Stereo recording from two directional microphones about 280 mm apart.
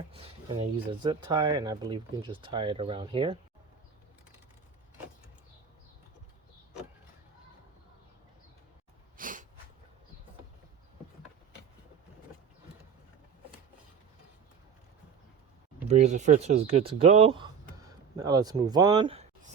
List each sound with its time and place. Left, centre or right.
0.1 s speech: centre
9.1 s sneeze: right
15.9 s speech: right